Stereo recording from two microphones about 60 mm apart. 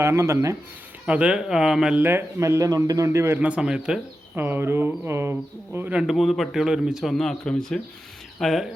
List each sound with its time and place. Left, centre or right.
0.0 s a man's voice: right
1.0 s speech: centre
2.0 s speech: right
2.4 s a man's voice: right
3.3 s a man's voice: right
3.6 s speech: centre
4.4 s speech: right
6.1 s a man's voice: centre
7.1 s a man's voice: centre